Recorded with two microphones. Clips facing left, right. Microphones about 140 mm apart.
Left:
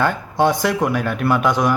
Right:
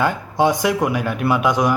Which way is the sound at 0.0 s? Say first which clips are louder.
Even; 10° right (ahead or behind).